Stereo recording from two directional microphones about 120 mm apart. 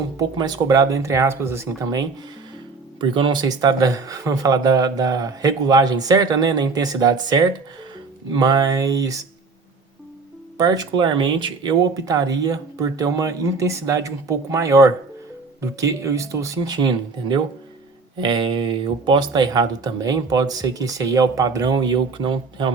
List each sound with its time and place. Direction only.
0.2 s speech: 35° right (ahead or behind)
3.0 s speech: 40° right (ahead or behind)
10.6 s speech: 35° right (ahead or behind)